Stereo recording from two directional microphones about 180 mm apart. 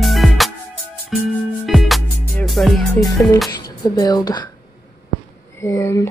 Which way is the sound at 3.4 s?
20° left (ahead or behind).